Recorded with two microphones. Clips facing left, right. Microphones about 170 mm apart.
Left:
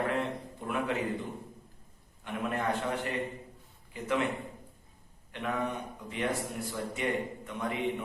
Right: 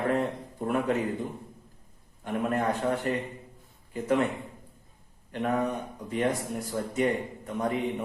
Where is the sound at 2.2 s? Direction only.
40° right (ahead or behind).